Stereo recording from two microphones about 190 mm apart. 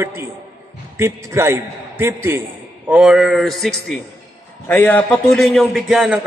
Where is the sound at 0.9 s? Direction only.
15° right (ahead or behind).